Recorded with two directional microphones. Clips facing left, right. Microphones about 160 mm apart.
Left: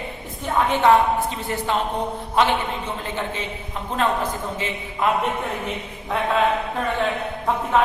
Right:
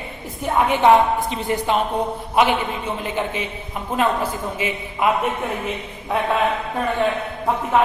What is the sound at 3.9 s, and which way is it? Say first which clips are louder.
A man's voice: right 2 dB; 10° right (ahead or behind).